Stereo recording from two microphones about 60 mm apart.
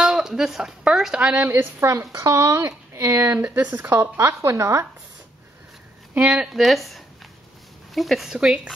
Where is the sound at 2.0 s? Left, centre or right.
Right.